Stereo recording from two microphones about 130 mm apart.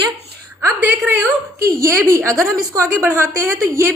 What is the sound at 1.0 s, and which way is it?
A woman's voice, 15° right (ahead or behind).